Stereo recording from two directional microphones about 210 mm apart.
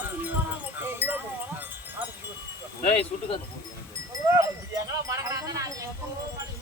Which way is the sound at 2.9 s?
25° left (ahead or behind).